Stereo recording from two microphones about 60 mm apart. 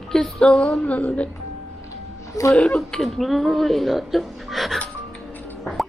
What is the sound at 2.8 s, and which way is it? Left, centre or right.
Speech, centre.